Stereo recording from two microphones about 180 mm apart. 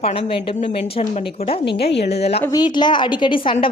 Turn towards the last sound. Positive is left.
turn(degrees=30)  # may be behind; listen again after turning